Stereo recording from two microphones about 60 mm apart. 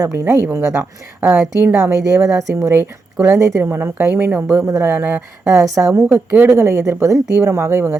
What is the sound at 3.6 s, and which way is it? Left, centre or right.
Speech, right.